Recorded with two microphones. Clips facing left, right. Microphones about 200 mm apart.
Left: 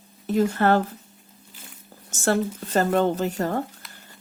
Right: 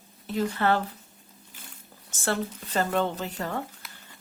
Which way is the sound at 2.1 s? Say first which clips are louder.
Left 6 dB; 45° left (ahead or behind).